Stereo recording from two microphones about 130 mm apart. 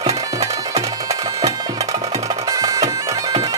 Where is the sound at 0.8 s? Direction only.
30° right (ahead or behind).